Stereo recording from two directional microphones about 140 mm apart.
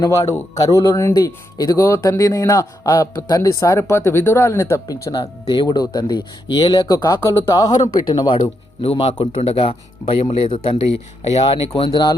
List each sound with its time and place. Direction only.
0.0 s speech: 25° left (ahead or behind)
5.2 s speech: 40° left (ahead or behind)
8.8 s speech: 45° left (ahead or behind)
9.2 s speech: 55° left (ahead or behind)
9.6 s speech: 40° left (ahead or behind)
11.9 s speech: 25° left (ahead or behind)